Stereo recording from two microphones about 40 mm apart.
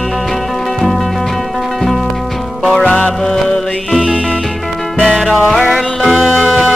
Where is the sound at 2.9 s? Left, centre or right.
Centre.